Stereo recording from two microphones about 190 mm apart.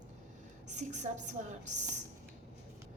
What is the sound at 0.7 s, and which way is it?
A woman's voice, 40° right (ahead or behind).